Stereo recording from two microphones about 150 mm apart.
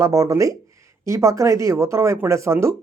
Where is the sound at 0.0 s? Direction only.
20° right (ahead or behind).